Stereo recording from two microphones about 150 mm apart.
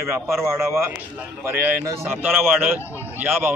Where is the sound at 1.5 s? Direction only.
15° right (ahead or behind).